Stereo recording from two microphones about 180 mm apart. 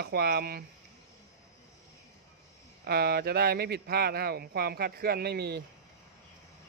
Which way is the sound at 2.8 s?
60° right (ahead or behind).